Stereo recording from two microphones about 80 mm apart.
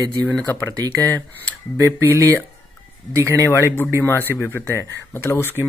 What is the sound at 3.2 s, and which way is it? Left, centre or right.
Speech, right.